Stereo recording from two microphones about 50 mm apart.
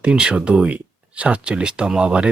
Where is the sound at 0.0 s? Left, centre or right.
Centre.